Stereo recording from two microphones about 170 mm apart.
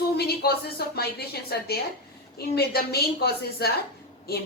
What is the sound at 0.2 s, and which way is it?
A woman's voice, 65° left (ahead or behind).